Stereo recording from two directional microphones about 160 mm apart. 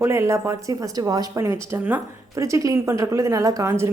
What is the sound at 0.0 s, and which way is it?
A woman's voice, 15° right (ahead or behind).